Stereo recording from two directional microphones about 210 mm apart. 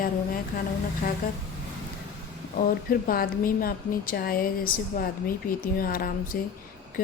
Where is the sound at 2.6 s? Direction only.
45° left (ahead or behind).